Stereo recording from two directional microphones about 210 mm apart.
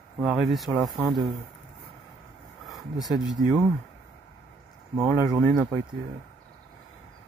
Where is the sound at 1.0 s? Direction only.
20° right (ahead or behind).